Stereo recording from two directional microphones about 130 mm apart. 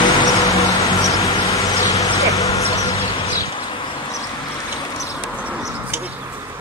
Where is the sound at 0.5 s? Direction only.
25° left (ahead or behind).